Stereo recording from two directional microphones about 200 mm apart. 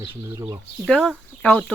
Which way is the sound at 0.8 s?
5° left (ahead or behind).